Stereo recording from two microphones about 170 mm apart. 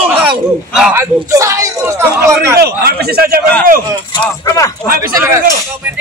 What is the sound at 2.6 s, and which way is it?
Speech, 70° right (ahead or behind).